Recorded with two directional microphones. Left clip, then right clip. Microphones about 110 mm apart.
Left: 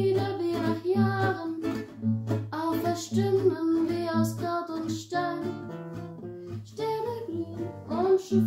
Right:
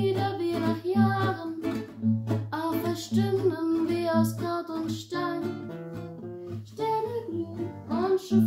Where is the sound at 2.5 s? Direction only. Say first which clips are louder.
Left 1 dB; 20° right (ahead or behind).